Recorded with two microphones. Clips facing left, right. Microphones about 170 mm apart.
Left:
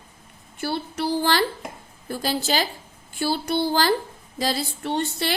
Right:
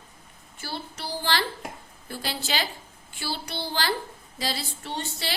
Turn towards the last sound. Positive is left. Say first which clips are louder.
# left 8 dB
turn(degrees=55)  # may be behind; listen again after turning